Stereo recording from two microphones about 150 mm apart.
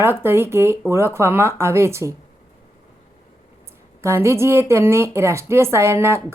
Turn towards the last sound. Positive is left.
turn(degrees=-15)  # may be behind; listen again after turning